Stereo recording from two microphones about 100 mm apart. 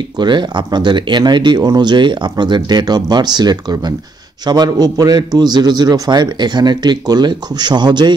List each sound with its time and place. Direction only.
0.2 s speech: 50° right (ahead or behind)